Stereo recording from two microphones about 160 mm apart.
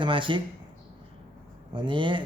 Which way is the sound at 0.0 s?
30° right (ahead or behind).